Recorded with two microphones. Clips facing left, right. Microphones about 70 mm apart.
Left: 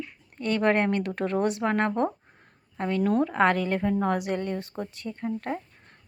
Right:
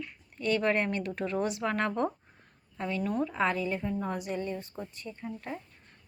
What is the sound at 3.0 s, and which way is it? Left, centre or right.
Speech, left.